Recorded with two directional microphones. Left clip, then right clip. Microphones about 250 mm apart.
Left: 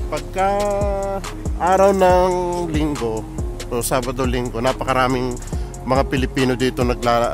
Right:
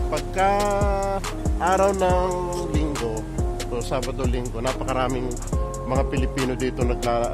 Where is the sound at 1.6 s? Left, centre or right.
Left.